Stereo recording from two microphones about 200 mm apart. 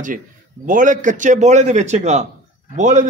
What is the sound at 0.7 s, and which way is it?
A man's voice, 40° right (ahead or behind).